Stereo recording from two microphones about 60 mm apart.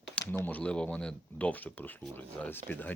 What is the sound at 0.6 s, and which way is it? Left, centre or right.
Speech, left.